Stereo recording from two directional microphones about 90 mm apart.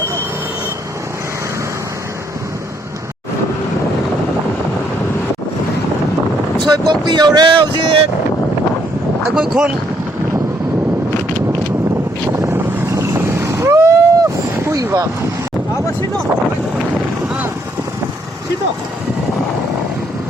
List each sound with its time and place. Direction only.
6.7 s speech: 50° right (ahead or behind); by 8.0 s 75° right (ahead or behind)
9.3 s speech: 5° right (ahead or behind)
12.4 s boat: 30° right (ahead or behind)
17.2 s vehicle: 15° right (ahead or behind)